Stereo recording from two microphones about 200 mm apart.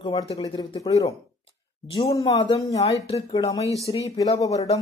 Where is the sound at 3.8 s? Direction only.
15° left (ahead or behind).